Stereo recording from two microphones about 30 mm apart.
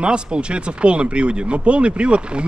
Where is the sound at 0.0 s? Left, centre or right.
Right.